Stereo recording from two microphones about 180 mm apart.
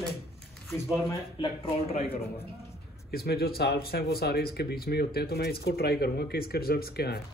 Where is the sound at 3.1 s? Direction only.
60° left (ahead or behind).